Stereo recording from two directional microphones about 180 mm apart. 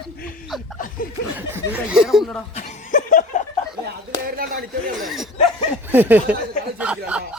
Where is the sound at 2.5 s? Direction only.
45° left (ahead or behind).